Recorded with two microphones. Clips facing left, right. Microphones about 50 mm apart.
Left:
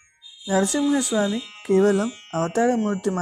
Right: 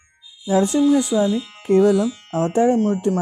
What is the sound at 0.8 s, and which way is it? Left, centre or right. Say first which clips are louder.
Speech: right 5 dB; left.